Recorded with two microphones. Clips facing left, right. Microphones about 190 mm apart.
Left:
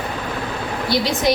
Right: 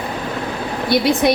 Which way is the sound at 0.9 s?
60° right (ahead or behind).